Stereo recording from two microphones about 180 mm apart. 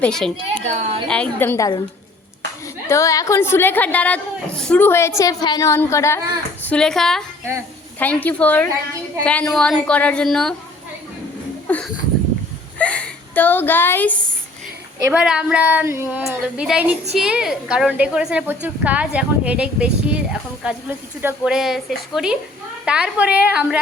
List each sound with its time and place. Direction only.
0.0 s speech: 5° left (ahead or behind)
0.6 s a woman's voice: 40° right (ahead or behind)
1.0 s a woman's voice: 5° left (ahead or behind)
2.9 s a woman's voice: 15° left (ahead or behind)
6.7 s a woman's voice: 5° left (ahead or behind)
11.7 s a sound: 5° left (ahead or behind)
15.1 s a woman's voice: 5° right (ahead or behind)